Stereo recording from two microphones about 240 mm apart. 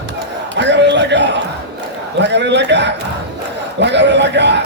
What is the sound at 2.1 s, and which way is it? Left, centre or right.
A man's voice, right.